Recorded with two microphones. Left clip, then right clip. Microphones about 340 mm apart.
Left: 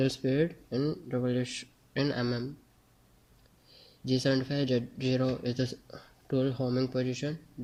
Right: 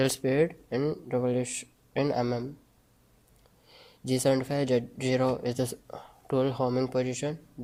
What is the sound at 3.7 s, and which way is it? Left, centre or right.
Speech, right.